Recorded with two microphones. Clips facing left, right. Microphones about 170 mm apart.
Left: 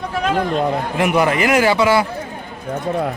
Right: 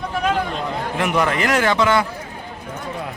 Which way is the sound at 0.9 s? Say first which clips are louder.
Left 3 dB; 10° left (ahead or behind).